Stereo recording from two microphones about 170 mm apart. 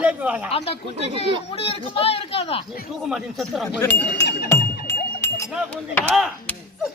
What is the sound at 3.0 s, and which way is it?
Speech, centre (ahead or behind).